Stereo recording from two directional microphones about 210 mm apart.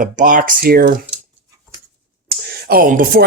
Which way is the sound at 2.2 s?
50° right (ahead or behind).